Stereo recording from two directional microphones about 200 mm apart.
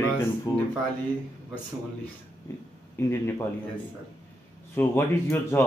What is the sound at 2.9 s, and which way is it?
Speech, 15° left (ahead or behind).